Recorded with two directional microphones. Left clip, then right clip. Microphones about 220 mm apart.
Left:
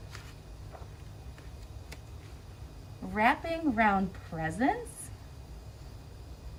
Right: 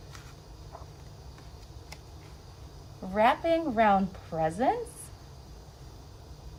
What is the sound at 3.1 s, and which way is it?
A woman's voice, 25° right (ahead or behind).